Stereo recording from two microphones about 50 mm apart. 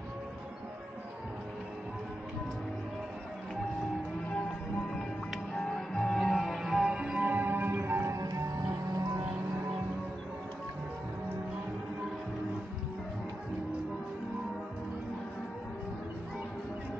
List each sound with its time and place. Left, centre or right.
5.3 s music: centre
7.2 s music: right